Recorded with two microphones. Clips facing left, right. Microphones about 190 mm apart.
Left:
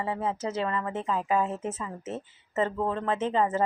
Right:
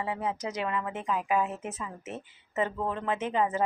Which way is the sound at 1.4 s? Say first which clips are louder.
Left 4 dB; 25° left (ahead or behind).